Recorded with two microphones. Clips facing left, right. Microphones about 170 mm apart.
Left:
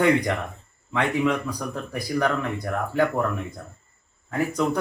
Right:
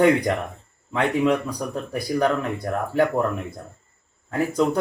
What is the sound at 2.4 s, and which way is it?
Speech, 15° right (ahead or behind).